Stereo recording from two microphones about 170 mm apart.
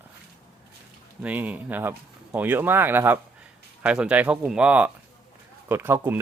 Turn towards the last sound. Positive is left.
turn(degrees=-15)  # may be behind; listen again after turning